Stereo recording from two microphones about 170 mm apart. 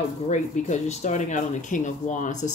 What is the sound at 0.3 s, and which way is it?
Speech, 45° left (ahead or behind).